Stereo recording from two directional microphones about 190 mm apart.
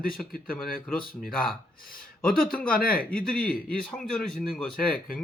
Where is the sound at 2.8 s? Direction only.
50° left (ahead or behind).